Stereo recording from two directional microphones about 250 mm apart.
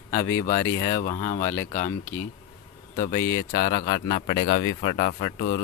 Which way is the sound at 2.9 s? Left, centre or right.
Left.